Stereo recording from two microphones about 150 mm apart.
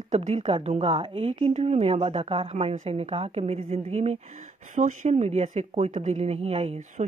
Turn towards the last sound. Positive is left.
turn(degrees=-50)  # may be behind; listen again after turning